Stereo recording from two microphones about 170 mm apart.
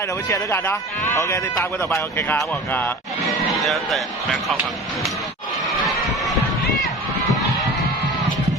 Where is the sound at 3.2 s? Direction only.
Centre (ahead or behind).